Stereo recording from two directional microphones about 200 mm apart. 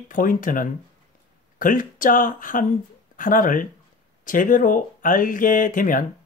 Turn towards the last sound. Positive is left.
turn(degrees=40)  # may be behind; listen again after turning